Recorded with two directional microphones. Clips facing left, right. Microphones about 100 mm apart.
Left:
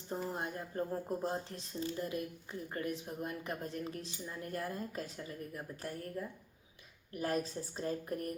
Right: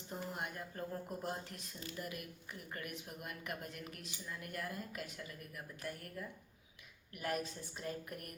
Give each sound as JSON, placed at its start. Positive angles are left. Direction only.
{"t": 0.3, "sound": "a woman's voice", "side_deg": 30}